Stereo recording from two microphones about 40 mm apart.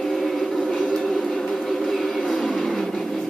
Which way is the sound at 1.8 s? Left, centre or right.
Centre.